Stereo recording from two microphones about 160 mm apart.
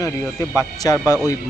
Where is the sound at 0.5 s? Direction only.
20° left (ahead or behind).